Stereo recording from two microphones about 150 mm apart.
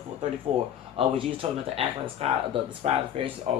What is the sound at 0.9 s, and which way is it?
Speech, 40° right (ahead or behind).